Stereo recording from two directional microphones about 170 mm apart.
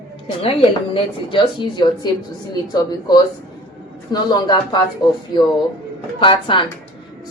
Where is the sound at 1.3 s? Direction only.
30° left (ahead or behind).